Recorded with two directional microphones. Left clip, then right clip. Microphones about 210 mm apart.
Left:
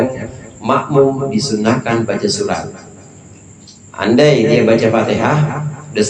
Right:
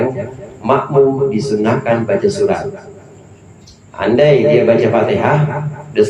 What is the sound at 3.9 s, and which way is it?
A man's voice, 25° left (ahead or behind).